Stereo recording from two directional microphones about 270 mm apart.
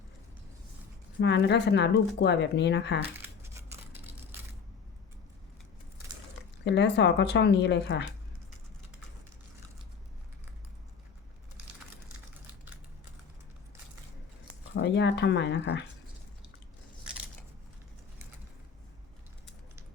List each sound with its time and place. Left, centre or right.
1.2 s speech: left
3.2 s crushing: centre
6.7 s speech: left
14.8 s speech: left